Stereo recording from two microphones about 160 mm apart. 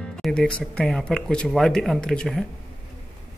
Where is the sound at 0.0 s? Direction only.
5° left (ahead or behind).